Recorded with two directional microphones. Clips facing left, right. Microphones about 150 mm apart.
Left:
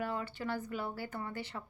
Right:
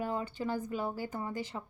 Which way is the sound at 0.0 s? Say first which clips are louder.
Right 3 dB; 20° right (ahead or behind).